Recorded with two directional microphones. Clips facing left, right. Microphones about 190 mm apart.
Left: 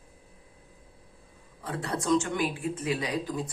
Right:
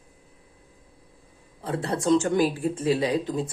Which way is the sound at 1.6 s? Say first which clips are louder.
Right 6 dB; 30° right (ahead or behind).